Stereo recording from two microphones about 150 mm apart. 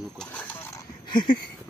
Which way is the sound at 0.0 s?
5° left (ahead or behind).